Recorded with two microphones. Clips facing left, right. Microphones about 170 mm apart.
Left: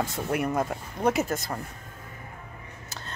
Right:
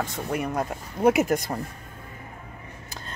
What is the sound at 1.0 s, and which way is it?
Speech, 10° right (ahead or behind).